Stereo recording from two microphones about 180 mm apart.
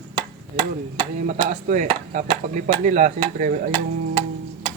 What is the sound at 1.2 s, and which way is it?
Speech, 45° right (ahead or behind).